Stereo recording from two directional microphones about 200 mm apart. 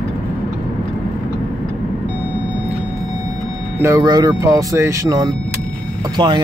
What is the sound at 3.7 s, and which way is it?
Speech, 15° right (ahead or behind).